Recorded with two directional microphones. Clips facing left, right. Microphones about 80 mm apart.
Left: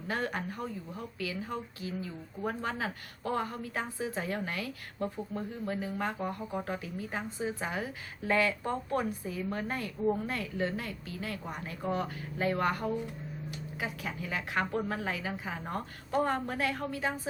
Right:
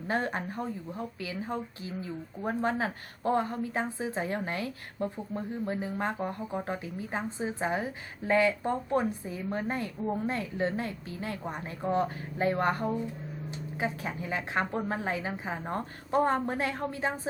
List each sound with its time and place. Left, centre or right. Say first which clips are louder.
0.1 s speech: right 3 dB; right